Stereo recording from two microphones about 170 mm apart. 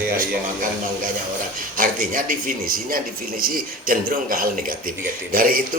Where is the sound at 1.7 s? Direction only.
55° right (ahead or behind).